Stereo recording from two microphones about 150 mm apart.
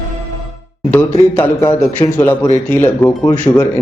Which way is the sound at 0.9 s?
10° left (ahead or behind).